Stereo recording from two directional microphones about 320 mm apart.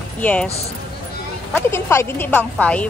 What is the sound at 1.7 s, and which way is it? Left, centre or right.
Speech, centre.